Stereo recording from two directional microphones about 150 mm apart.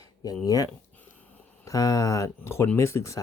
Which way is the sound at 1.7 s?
20° left (ahead or behind).